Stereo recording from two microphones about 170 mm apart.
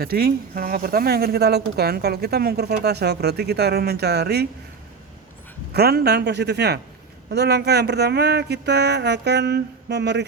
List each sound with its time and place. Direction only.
0.0 s a woman's voice: 60° right (ahead or behind)
5.7 s a woman's voice: 70° right (ahead or behind); by 10.2 s 85° right